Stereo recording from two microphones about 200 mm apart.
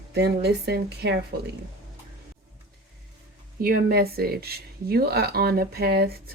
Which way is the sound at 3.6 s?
45° right (ahead or behind).